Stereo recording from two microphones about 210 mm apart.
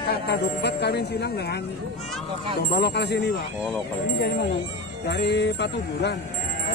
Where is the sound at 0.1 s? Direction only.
50° left (ahead or behind).